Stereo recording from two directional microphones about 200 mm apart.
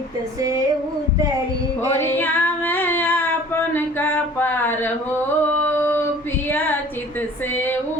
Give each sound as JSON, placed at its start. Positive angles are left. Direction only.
{"t": 0.3, "sound": "female singing", "side_deg": -15}
{"t": 1.9, "sound": "female singing", "side_deg": 10}
{"t": 7.2, "sound": "a sound", "side_deg": 10}